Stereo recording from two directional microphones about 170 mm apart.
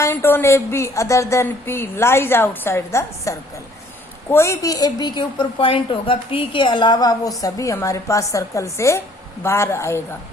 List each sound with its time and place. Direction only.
0.0 s a woman's voice: 15° left (ahead or behind)